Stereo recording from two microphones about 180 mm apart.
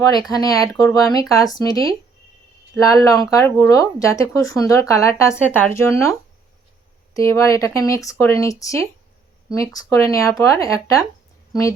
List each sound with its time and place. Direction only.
0.3 s speech: 20° left (ahead or behind)